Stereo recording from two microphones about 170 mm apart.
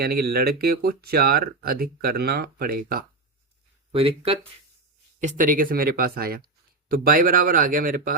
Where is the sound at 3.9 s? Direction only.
30° right (ahead or behind).